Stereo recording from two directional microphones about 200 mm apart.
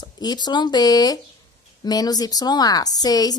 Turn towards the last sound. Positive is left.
turn(degrees=20)  # may be behind; listen again after turning